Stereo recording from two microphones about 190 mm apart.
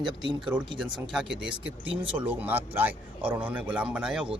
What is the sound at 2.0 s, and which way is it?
Speech, 30° right (ahead or behind).